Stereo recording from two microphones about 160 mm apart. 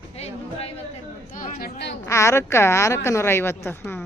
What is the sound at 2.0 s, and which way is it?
A woman's voice, 20° left (ahead or behind).